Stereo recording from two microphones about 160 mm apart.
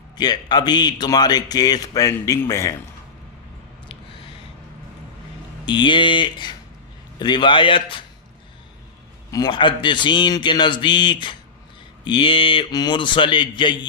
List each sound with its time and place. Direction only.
0.2 s a man's voice: 25° left (ahead or behind)
3.8 s a sound: 35° left (ahead or behind)
5.6 s a man's voice: 30° left (ahead or behind)
9.3 s a man's voice: 25° left (ahead or behind)